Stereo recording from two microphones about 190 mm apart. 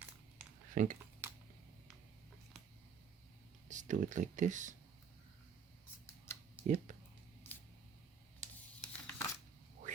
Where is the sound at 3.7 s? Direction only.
40° right (ahead or behind).